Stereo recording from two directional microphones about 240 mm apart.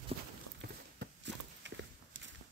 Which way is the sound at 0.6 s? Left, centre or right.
Right.